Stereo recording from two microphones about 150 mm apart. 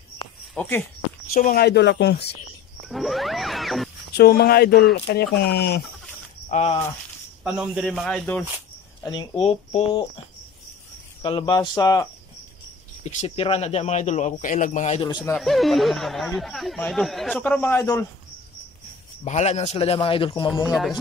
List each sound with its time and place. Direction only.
0.6 s speech: 10° left (ahead or behind)
1.3 s speech: 75° left (ahead or behind); by 2.3 s 90° left
2.9 s wild animals: centre (ahead or behind)
4.1 s speech: 90° left
6.5 s speech: 45° left (ahead or behind)
7.4 s speech: 5° right (ahead or behind)
9.0 s a man's voice: 30° left (ahead or behind)
11.2 s speech: 30° left (ahead or behind)
13.0 s speech: 45° left (ahead or behind)
15.0 s a man's voice: 30° left (ahead or behind)
15.3 s speech: centre (ahead or behind)
19.2 s a man's voice: 50° left (ahead or behind); by 20.6 s 35° left (ahead or behind)